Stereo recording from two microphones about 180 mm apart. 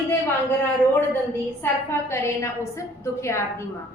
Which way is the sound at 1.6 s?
15° left (ahead or behind).